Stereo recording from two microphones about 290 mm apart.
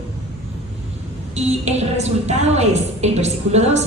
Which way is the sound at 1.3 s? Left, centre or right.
Right.